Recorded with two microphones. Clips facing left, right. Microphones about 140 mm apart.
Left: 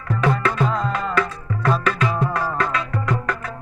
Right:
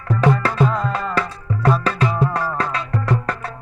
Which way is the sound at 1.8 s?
35° right (ahead or behind).